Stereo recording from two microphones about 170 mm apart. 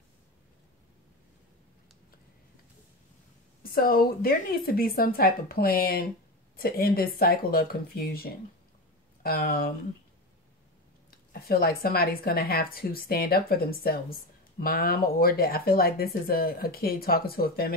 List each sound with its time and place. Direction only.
3.6 s speech: 60° left (ahead or behind)
9.2 s speech: 60° left (ahead or behind)
11.1 s speech: 60° left (ahead or behind)